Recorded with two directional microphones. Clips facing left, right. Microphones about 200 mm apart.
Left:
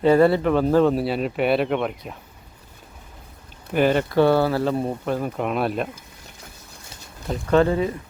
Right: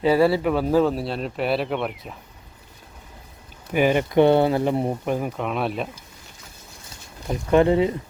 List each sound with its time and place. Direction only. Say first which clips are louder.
0.0 s speech: left 2 dB; 5° right (ahead or behind)
3.7 s speech: even; 10° right (ahead or behind)
5.4 s speech: left 2 dB; centre (ahead or behind)
7.3 s speech: right 1 dB; 15° right (ahead or behind)